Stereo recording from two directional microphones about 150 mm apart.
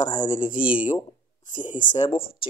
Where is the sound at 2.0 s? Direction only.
25° left (ahead or behind).